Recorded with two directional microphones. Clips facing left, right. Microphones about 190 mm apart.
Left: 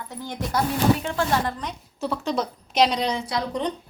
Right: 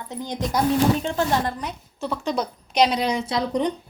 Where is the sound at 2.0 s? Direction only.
Centre (ahead or behind).